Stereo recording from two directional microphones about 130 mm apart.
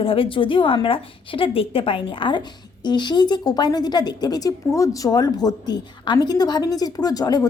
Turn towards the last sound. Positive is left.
turn(degrees=30)  # may be behind; listen again after turning